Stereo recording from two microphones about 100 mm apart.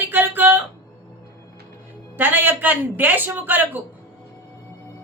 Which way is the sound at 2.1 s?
20° right (ahead or behind).